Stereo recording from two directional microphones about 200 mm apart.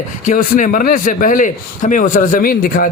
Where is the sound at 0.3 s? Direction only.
40° left (ahead or behind).